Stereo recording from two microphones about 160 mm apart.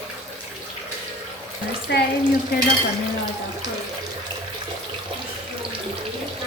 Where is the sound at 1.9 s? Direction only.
90° left.